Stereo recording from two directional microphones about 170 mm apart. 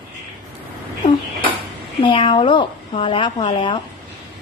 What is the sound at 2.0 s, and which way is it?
A woman's voice, 30° left (ahead or behind).